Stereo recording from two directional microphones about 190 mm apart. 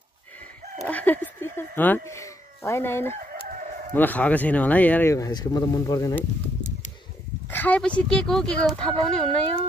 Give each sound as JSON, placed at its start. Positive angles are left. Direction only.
{"t": 0.8, "sound": "speech", "side_deg": 10}
{"t": 3.2, "sound": "chicken", "side_deg": -45}
{"t": 3.9, "sound": "speech", "side_deg": 10}
{"t": 7.4, "sound": "speech", "side_deg": 10}